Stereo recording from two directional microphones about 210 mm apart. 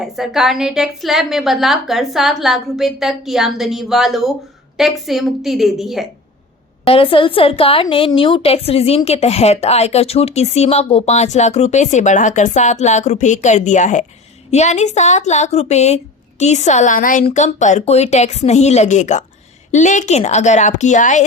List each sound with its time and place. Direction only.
0.0 s a woman's voice: centre (ahead or behind)
6.8 s a woman's voice: 25° left (ahead or behind)